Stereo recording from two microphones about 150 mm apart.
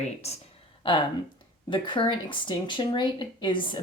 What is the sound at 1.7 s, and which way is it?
Speech, 30° left (ahead or behind).